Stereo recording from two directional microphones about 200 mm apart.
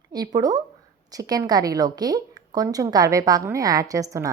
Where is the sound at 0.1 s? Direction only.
20° right (ahead or behind).